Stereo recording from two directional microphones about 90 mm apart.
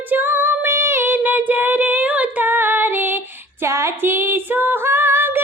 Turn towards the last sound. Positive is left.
turn(degrees=-25)  # may be behind; listen again after turning